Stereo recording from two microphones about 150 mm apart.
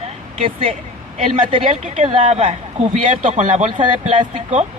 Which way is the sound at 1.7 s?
50° right (ahead or behind).